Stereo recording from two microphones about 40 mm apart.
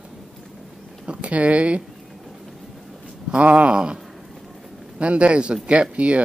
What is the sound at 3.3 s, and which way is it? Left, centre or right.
Speech, right.